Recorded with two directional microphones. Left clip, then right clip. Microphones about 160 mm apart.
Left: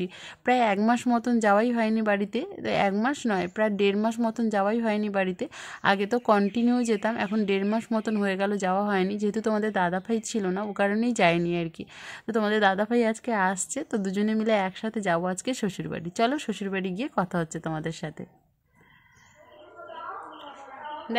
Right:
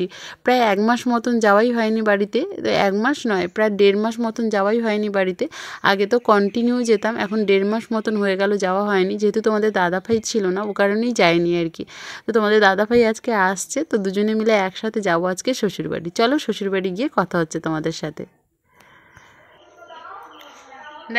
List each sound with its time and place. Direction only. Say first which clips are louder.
0.0 s speech: right 7 dB; 25° right (ahead or behind)